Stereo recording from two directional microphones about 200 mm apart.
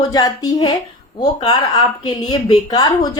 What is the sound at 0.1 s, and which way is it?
A woman's voice, 20° left (ahead or behind).